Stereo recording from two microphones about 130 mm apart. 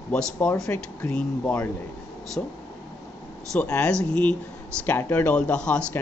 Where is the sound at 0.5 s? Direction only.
20° left (ahead or behind).